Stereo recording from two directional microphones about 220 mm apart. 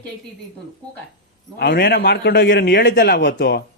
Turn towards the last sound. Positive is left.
turn(degrees=50)  # may be behind; listen again after turning